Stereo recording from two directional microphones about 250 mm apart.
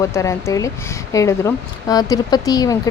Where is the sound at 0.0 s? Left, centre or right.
Centre.